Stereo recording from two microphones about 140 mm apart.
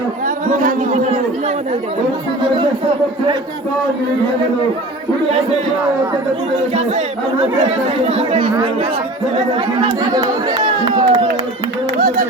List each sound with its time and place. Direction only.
0.3 s speech: 70° right (ahead or behind)
6.7 s speech: 50° right (ahead or behind)
9.6 s speech: 30° right (ahead or behind)
11.9 s a sound: 90° right